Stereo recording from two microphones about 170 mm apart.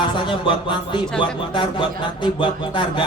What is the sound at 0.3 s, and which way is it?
A man's voice, 30° left (ahead or behind).